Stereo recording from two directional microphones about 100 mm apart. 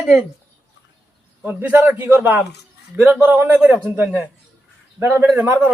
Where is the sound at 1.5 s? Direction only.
20° right (ahead or behind).